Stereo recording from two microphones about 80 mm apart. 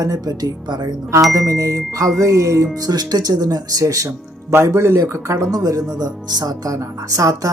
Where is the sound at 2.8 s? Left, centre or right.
Right.